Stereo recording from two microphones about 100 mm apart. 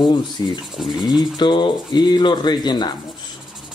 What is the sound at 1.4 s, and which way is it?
Speech, 50° left (ahead or behind).